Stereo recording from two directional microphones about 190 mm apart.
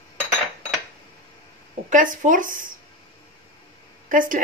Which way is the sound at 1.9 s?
45° right (ahead or behind).